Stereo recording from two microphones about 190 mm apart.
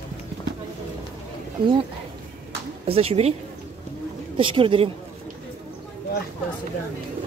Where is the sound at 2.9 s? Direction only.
30° right (ahead or behind).